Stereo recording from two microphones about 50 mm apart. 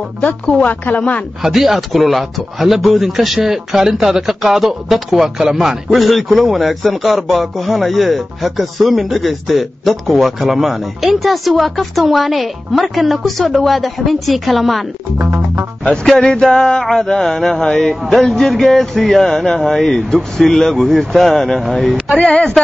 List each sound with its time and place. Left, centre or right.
0.2 s speech: left
1.4 s speech: centre
15.1 s music: right
16.1 s speech: centre
22.2 s speech: centre